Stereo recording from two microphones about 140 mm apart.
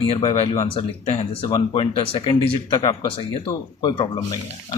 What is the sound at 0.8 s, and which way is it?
Speech, 45° left (ahead or behind).